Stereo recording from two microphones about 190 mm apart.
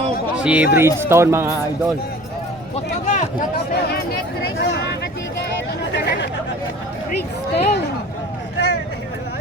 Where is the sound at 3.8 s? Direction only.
55° left (ahead or behind).